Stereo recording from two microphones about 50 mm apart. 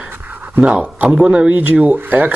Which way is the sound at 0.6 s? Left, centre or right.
Right.